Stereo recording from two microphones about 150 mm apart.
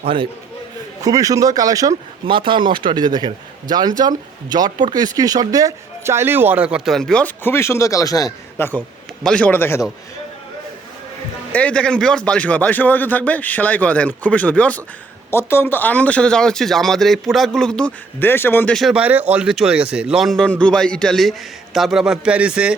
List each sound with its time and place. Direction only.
0.0 s a man's voice: 35° right (ahead or behind)
1.0 s a man's voice: 25° right (ahead or behind)
2.2 s a man's voice: 35° right (ahead or behind); by 9.8 s 15° left (ahead or behind)
11.5 s a man's voice: 10° left (ahead or behind)
18.7 s a man's voice: centre (ahead or behind)